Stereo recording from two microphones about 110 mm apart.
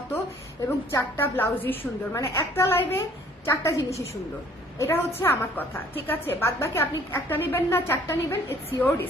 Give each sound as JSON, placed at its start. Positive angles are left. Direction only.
{"t": 0.9, "sound": "a woman's voice", "side_deg": 20}